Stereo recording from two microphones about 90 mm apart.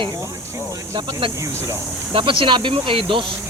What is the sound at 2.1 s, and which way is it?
Speech, 70° right (ahead or behind).